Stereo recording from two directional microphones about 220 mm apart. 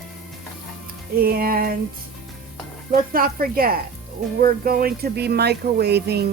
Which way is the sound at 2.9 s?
40° right (ahead or behind).